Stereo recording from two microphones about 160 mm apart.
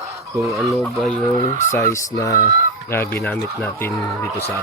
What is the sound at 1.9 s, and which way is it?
Speech, 20° left (ahead or behind).